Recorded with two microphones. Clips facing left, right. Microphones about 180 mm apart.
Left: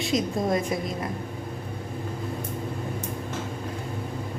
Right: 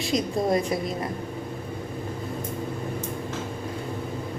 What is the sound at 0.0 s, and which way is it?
Speech, centre (ahead or behind).